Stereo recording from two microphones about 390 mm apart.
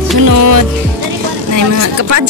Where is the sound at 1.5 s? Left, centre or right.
Right.